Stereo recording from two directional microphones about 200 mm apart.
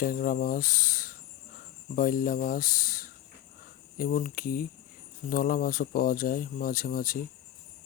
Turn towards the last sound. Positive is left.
turn(degrees=45)  # may be behind; listen again after turning